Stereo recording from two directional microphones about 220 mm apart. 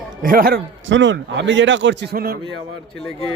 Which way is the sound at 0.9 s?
55° right (ahead or behind).